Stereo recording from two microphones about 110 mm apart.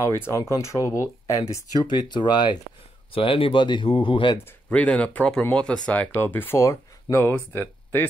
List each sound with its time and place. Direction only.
0.3 s speech: 30° left (ahead or behind); by 2.5 s 45° left (ahead or behind)
3.1 s speech: 55° left (ahead or behind)
4.6 s speech: 10° left (ahead or behind)